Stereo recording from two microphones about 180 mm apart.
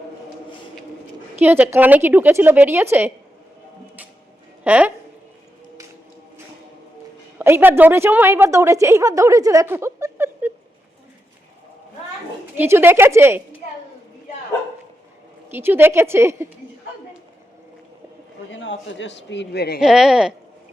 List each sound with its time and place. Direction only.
1.4 s a woman's voice: 10° right (ahead or behind)
4.6 s speech: 10° right (ahead or behind)
7.3 s a woman's voice: 10° right (ahead or behind)
12.5 s a woman's voice: 10° right (ahead or behind)
15.4 s a woman's voice: 10° right (ahead or behind)
18.5 s a man's voice: 90° left; by 19.8 s 65° left (ahead or behind)
19.8 s speech: 5° right (ahead or behind)